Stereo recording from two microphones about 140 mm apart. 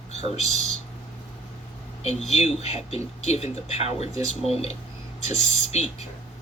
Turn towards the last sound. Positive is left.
turn(degrees=50)  # may be behind; listen again after turning